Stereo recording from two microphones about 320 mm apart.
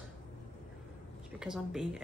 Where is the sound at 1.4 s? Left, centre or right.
Centre.